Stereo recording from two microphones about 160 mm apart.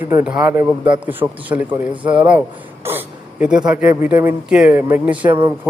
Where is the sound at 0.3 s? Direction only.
10° right (ahead or behind).